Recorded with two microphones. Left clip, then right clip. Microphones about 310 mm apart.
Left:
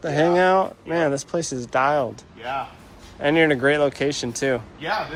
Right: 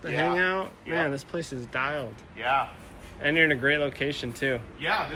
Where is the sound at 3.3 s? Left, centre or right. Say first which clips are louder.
Left 4 dB; left.